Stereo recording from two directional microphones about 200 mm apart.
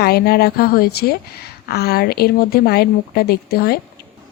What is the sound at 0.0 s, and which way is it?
Speech, 50° left (ahead or behind).